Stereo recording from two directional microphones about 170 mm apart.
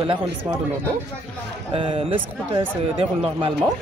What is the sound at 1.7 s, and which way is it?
Speech, 35° right (ahead or behind).